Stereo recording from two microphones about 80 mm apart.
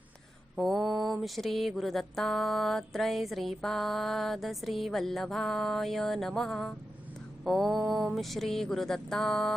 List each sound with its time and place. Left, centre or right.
0.6 s mantra: centre